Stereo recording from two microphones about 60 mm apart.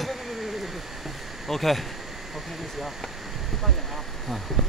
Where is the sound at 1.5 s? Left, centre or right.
Centre.